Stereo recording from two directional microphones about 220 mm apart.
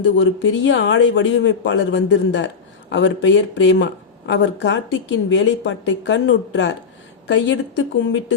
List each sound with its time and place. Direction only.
0.0 s speech: 55° left (ahead or behind)